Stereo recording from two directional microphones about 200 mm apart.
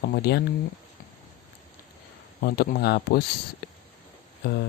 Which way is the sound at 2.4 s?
50° left (ahead or behind).